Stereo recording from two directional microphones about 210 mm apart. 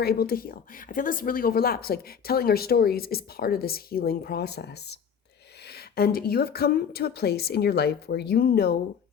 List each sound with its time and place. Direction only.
0.0 s speech: 45° left (ahead or behind)
6.0 s speech: 45° left (ahead or behind)